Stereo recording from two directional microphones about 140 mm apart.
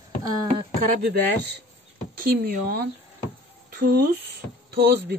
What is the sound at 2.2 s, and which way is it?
Speech, 90° right.